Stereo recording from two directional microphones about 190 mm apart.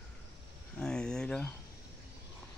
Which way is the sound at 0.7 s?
5° left (ahead or behind).